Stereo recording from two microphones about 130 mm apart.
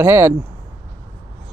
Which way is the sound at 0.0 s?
20° right (ahead or behind).